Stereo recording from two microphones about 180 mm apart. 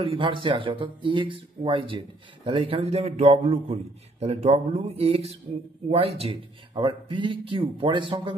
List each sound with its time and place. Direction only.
0.0 s speech: 30° right (ahead or behind)